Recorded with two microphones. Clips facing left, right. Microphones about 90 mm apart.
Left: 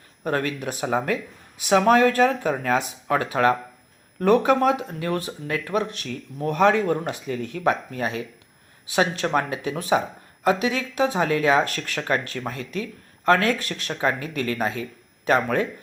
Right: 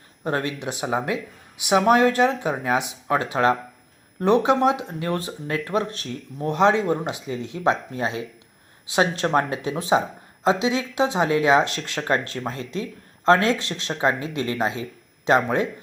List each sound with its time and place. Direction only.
0.3 s speech: 20° right (ahead or behind)